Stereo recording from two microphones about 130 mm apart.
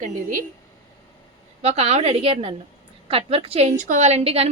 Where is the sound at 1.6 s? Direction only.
55° right (ahead or behind).